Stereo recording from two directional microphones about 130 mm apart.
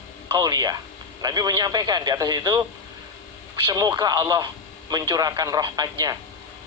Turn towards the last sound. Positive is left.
turn(degrees=-30)  # may be behind; listen again after turning